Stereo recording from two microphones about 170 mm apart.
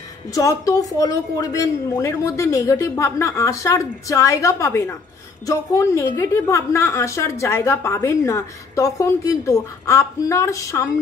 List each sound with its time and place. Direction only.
0.3 s a woman's voice: 20° left (ahead or behind)